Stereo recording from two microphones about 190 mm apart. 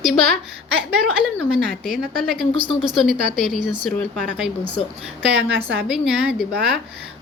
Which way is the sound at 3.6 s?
25° right (ahead or behind).